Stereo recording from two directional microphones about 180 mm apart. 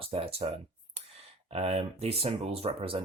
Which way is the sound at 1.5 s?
35° right (ahead or behind).